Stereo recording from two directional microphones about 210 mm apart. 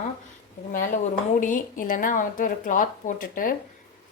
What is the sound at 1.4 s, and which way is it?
A woman's voice, 40° left (ahead or behind).